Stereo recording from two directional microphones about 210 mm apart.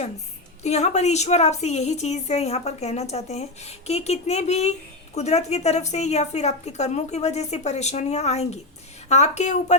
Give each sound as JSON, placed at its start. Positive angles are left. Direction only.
{"t": 0.6, "sound": "a woman's voice", "side_deg": 30}